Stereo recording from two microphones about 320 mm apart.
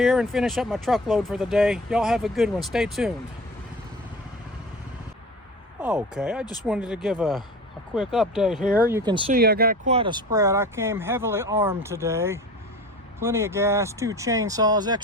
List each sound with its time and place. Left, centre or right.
0.0 s speech: centre
5.8 s speech: centre
9.3 s speech: right; by 15.0 s centre